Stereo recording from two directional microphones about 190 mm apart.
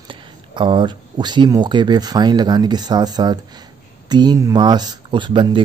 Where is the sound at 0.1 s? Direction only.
25° right (ahead or behind).